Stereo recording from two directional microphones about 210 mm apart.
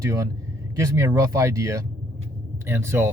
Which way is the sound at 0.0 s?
15° right (ahead or behind).